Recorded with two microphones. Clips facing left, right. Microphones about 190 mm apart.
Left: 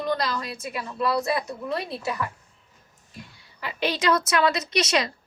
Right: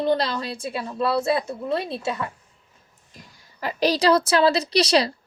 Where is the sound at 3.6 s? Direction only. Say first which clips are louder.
Right 6 dB; 40° right (ahead or behind).